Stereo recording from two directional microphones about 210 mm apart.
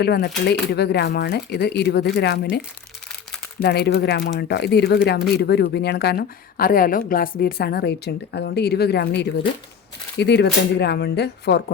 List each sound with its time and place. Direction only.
0.0 s speech: 50° left (ahead or behind)
3.6 s speech: 50° left (ahead or behind)